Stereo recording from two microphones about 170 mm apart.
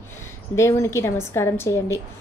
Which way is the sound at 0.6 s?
15° left (ahead or behind).